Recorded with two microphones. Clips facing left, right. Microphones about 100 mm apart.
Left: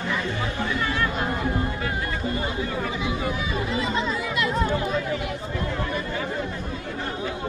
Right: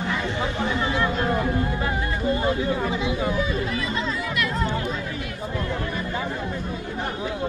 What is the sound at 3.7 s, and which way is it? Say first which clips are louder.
Speech: left 1 dB; 20° left (ahead or behind).